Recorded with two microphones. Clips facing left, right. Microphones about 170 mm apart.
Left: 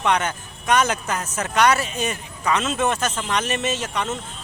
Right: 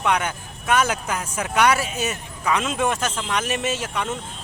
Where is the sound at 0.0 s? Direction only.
10° right (ahead or behind).